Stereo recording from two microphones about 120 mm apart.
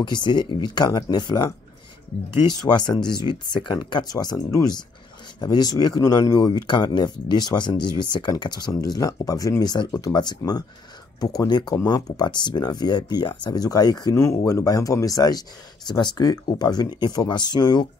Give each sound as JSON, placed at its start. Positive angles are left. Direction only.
{"t": 0.0, "sound": "speech", "side_deg": 40}
{"t": 2.7, "sound": "speech", "side_deg": 35}